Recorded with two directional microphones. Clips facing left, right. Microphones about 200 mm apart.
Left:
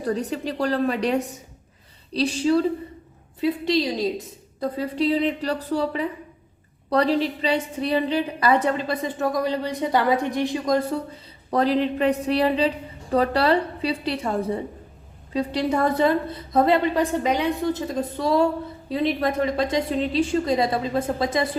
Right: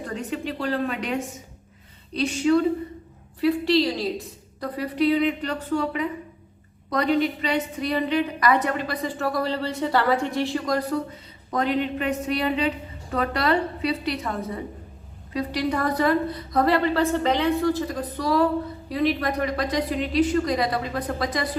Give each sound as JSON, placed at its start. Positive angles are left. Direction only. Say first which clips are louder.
{"t": 0.0, "sound": "a woman's voice", "louder": "left 4 dB", "side_deg": 35}
{"t": 3.4, "sound": "a woman's voice", "louder": "right 2 dB", "side_deg": 20}
{"t": 11.5, "sound": "a woman's voice", "louder": "left 3 dB", "side_deg": 35}